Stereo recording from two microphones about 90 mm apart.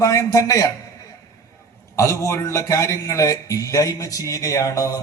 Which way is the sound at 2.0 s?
35° left (ahead or behind).